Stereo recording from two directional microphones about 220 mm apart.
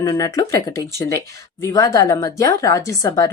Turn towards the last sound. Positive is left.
turn(degrees=15)  # may be behind; listen again after turning